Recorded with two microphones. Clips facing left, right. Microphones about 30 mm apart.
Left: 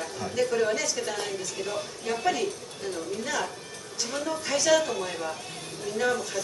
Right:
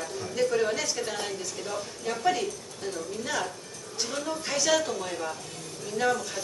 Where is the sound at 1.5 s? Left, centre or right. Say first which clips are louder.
Left 2 dB; left.